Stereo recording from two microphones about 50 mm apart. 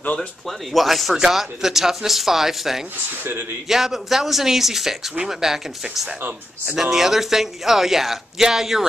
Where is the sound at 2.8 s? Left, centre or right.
Right.